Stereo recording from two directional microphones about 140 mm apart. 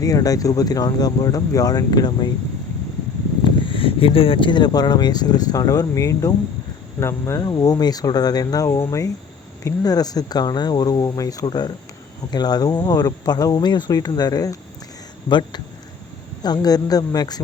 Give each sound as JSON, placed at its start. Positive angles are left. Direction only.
{"t": 0.0, "sound": "speech", "side_deg": 25}
{"t": 3.4, "sound": "speech", "side_deg": 40}